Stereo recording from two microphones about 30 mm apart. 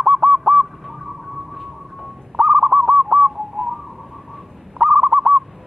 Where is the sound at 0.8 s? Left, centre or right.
Centre.